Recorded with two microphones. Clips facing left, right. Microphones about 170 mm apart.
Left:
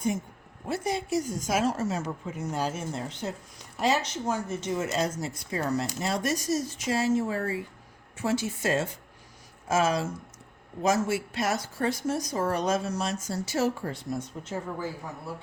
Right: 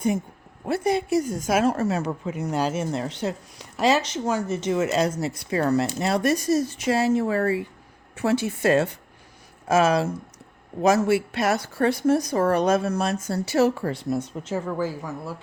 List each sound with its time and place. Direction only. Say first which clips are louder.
0.6 s a woman's voice: right 7 dB; 60° right (ahead or behind); by 15.3 s 90° right